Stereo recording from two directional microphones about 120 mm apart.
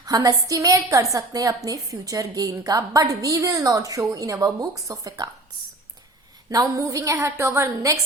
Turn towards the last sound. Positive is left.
turn(degrees=-25)  # may be behind; listen again after turning